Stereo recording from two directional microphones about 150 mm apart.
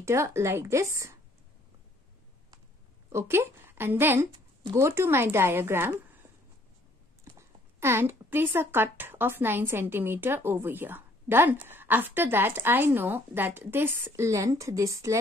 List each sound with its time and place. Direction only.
0.0 s a woman's voice: 20° right (ahead or behind)
3.1 s a woman's voice: 15° right (ahead or behind)
7.3 s speech: 15° right (ahead or behind)